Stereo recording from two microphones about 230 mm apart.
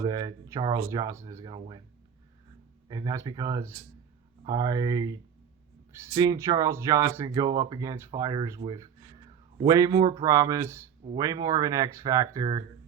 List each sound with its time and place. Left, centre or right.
0.0 s speech: centre
2.9 s speech: centre